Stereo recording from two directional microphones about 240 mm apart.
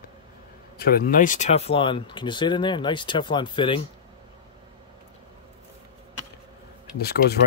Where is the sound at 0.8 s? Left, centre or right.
Left.